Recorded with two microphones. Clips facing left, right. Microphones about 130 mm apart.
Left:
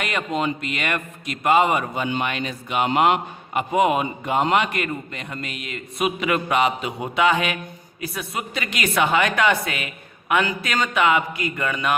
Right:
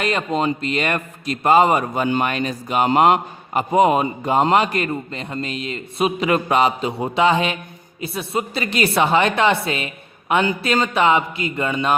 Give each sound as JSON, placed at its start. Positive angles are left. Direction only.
{"t": 0.0, "sound": "a man's voice", "side_deg": -35}